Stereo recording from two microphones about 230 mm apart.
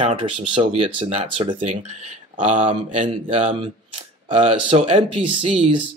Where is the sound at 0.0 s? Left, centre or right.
Right.